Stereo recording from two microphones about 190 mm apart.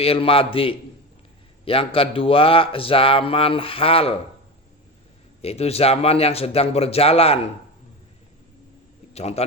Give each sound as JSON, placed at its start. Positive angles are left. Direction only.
{"t": 0.0, "sound": "a man's voice", "side_deg": 30}
{"t": 5.4, "sound": "a man's voice", "side_deg": 30}
{"t": 9.1, "sound": "a man's voice", "side_deg": 35}